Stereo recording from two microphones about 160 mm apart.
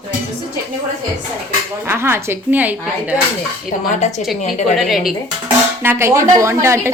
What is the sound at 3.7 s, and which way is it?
Speech, 55° left (ahead or behind).